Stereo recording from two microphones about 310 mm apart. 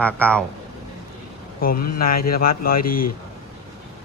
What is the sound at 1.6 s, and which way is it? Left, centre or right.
Speech, left.